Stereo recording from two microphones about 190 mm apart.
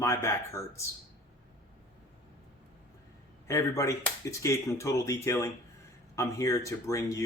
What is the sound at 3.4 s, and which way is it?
Speech, 15° left (ahead or behind).